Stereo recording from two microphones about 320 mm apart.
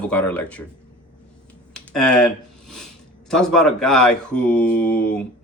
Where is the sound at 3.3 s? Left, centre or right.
Centre.